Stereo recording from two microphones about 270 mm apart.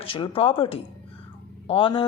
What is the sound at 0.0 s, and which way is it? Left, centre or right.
Speech, centre.